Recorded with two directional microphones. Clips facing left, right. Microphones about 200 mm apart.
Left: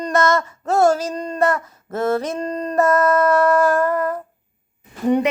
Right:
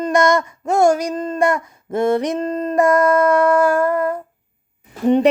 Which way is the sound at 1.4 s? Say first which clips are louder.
Even; 15° right (ahead or behind).